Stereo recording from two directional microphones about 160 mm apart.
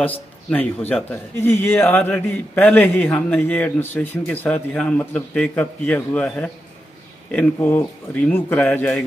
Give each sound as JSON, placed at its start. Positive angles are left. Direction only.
{"t": 0.0, "sound": "a man's voice", "side_deg": 10}